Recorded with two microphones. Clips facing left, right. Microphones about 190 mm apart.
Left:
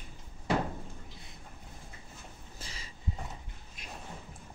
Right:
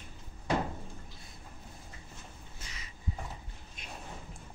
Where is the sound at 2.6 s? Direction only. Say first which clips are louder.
Left 3 dB; 30° left (ahead or behind).